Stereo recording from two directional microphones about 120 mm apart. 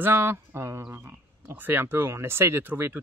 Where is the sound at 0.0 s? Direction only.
15° right (ahead or behind).